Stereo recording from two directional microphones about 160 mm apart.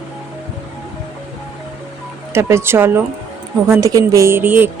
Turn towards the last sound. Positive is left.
turn(degrees=-10)  # may be behind; listen again after turning